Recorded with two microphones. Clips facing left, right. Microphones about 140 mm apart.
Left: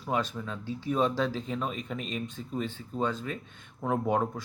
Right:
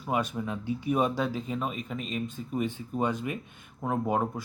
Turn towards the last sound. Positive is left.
turn(degrees=-5)  # may be behind; listen again after turning